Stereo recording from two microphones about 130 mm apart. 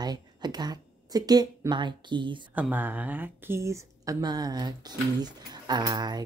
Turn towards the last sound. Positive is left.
turn(degrees=-30)  # may be behind; listen again after turning